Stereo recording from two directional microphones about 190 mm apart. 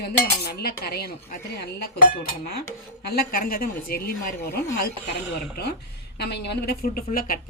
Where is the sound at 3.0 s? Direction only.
55° left (ahead or behind).